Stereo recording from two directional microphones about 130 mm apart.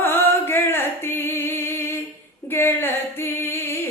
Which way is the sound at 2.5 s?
15° left (ahead or behind).